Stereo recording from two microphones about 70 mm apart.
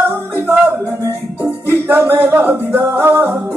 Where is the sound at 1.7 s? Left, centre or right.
Right.